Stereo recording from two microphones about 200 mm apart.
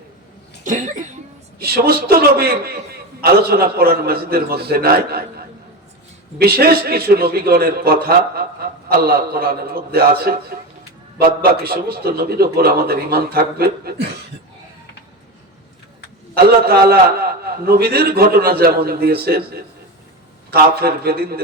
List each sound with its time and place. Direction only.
0.6 s speech: 40° right (ahead or behind)
1.5 s a man's voice: 50° right (ahead or behind)
6.4 s a man's voice: 50° right (ahead or behind)
16.3 s a man's voice: 50° right (ahead or behind)